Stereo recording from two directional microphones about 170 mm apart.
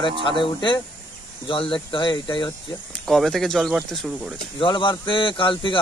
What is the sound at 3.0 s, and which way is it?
Speech, centre (ahead or behind).